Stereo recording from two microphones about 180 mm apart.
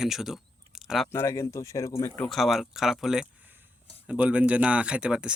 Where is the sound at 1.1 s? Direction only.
15° left (ahead or behind).